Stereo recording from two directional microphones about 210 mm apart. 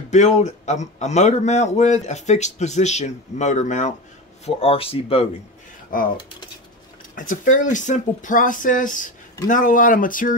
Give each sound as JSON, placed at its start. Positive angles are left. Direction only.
{"t": 0.1, "sound": "a man's voice", "side_deg": 35}
{"t": 5.9, "sound": "a man's voice", "side_deg": 40}